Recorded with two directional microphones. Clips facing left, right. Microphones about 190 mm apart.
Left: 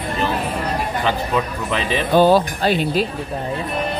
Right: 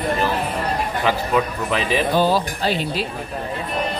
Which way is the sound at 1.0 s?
5° right (ahead or behind).